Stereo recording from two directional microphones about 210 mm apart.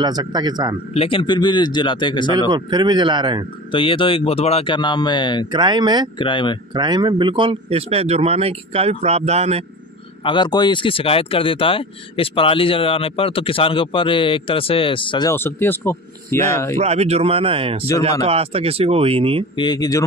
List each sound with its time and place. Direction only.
0.0 s speech: 20° right (ahead or behind)
0.9 s speech: 25° left (ahead or behind)
2.5 s speech: 20° right (ahead or behind)
3.7 s speech: 25° left (ahead or behind)
5.5 s speech: 20° right (ahead or behind)
6.1 s speech: 25° left (ahead or behind)
6.7 s speech: 20° right (ahead or behind)
10.2 s speech: 20° left (ahead or behind)
16.7 s speech: 30° right (ahead or behind)
19.5 s speech: 20° left (ahead or behind)